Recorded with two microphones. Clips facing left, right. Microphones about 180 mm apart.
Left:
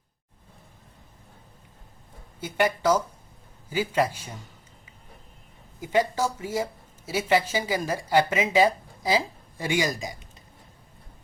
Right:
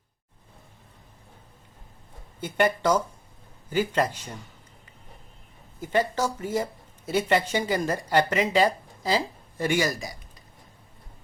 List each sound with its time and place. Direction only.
2.4 s speech: 5° left (ahead or behind)
5.8 s speech: 10° left (ahead or behind)